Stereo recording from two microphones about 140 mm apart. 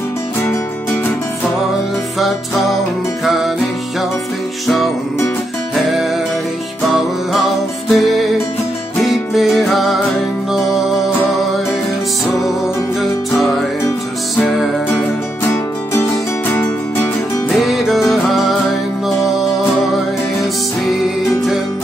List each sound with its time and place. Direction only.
2.1 s music: centre (ahead or behind)
5.8 s music: centre (ahead or behind)
15.9 s music: 20° left (ahead or behind)
17.6 s music: centre (ahead or behind)